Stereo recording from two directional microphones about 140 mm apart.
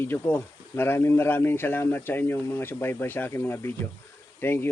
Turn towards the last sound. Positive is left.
turn(degrees=15)  # may be behind; listen again after turning